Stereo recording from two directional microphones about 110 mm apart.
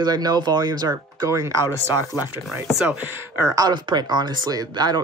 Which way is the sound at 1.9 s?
35° left (ahead or behind).